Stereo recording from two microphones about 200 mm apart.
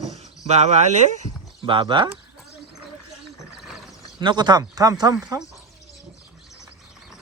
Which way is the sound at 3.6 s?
Centre (ahead or behind).